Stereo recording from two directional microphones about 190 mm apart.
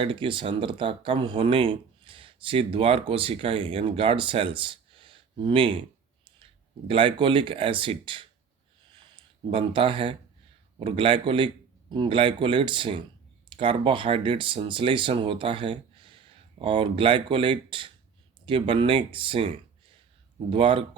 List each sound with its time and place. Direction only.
0.0 s speech: 25° right (ahead or behind)
8.9 s a sound: 25° right (ahead or behind)
10.8 s speech: 25° right (ahead or behind)